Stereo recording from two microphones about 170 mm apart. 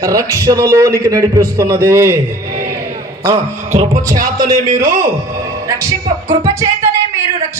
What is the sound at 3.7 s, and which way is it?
Speech, 45° right (ahead or behind).